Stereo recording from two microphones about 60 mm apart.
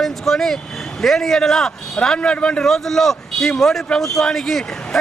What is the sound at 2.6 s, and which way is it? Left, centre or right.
A man's voice, centre.